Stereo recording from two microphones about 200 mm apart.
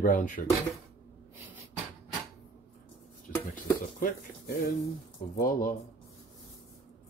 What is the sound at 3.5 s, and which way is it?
Speech, 40° left (ahead or behind).